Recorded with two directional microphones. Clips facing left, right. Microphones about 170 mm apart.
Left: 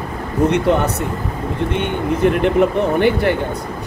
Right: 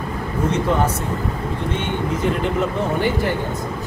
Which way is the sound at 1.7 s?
60° left (ahead or behind).